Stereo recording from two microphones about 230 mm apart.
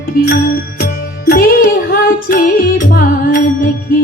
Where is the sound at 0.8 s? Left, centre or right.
Left.